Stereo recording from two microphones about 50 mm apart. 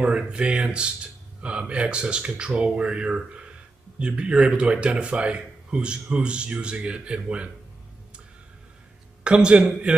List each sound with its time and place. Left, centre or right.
0.0 s a man's voice: right
9.2 s a man's voice: right